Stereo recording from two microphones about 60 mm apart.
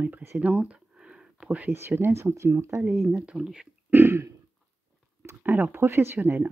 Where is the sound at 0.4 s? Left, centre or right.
Right.